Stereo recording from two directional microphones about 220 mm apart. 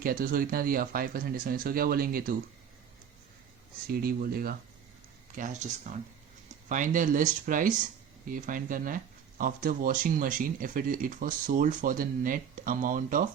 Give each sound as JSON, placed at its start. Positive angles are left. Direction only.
{"t": 0.0, "sound": "speech", "side_deg": -40}
{"t": 3.8, "sound": "speech", "side_deg": -40}